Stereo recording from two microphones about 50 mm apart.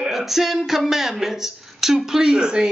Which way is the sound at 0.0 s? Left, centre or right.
Centre.